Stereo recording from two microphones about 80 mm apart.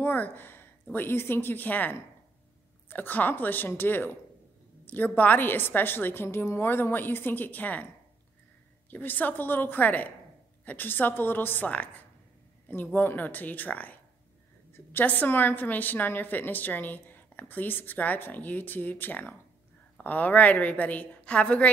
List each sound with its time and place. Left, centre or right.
0.0 s a woman's voice: left
8.9 s a woman's voice: left